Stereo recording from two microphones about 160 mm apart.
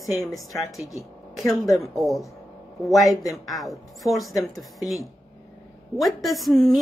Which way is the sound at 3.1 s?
20° left (ahead or behind).